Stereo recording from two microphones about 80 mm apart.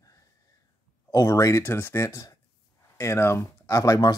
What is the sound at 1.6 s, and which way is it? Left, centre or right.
Speech, left.